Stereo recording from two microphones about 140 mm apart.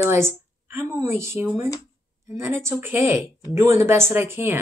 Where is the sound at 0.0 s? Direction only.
15° right (ahead or behind).